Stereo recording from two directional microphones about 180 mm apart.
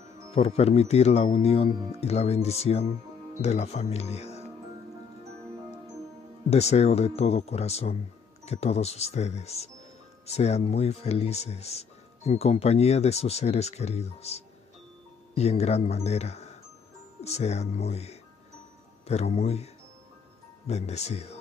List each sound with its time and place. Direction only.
0.3 s speech: 35° left (ahead or behind)
6.5 s speech: 35° left (ahead or behind)